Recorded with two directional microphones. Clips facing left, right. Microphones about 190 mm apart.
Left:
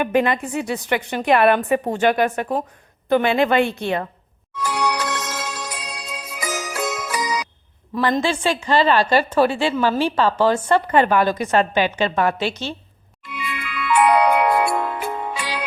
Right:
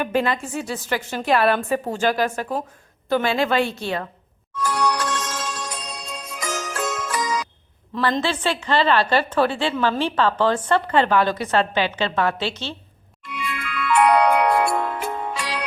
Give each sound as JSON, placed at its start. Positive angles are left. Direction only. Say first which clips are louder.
{"t": 0.0, "sound": "a woman's voice", "louder": "left 3 dB", "side_deg": 10}
{"t": 0.9, "sound": "a woman's voice", "louder": "left 3 dB", "side_deg": 60}
{"t": 3.1, "sound": "a woman's voice", "louder": "left 3 dB", "side_deg": 20}
{"t": 3.5, "sound": "a woman's voice", "louder": "left 3 dB", "side_deg": 55}
{"t": 4.5, "sound": "music", "louder": "even", "side_deg": 10}
{"t": 7.9, "sound": "a woman's voice", "louder": "left 2 dB", "side_deg": 15}
{"t": 13.2, "sound": "music", "louder": "even", "side_deg": 0}